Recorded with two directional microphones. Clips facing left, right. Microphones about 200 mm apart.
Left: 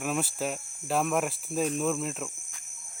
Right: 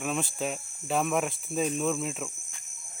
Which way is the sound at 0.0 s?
5° left (ahead or behind).